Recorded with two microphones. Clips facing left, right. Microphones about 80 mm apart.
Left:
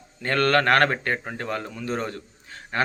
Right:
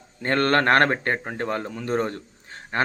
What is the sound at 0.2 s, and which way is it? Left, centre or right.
Speech, right.